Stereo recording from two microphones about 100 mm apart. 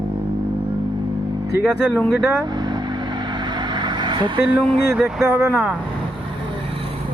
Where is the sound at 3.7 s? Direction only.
50° right (ahead or behind).